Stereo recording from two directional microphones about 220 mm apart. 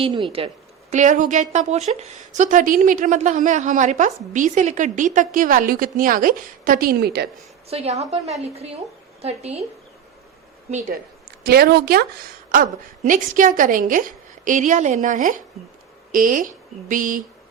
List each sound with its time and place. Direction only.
0.0 s a woman's voice: 25° right (ahead or behind); by 7.3 s 45° right (ahead or behind)
7.7 s a woman's voice: 30° right (ahead or behind)
10.7 s a woman's voice: 35° right (ahead or behind)
13.1 s a woman's voice: 35° right (ahead or behind)